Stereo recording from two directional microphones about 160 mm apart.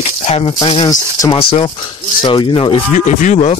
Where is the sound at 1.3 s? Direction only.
35° left (ahead or behind).